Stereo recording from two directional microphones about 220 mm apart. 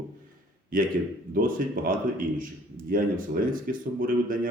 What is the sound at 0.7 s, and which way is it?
A man's voice, 40° right (ahead or behind).